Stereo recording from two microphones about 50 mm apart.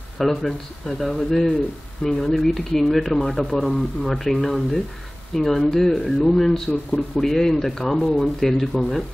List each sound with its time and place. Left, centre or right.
0.2 s speech: centre